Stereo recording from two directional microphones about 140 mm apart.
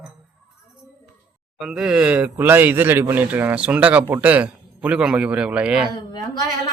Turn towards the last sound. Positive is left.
turn(degrees=30)  # may be behind; listen again after turning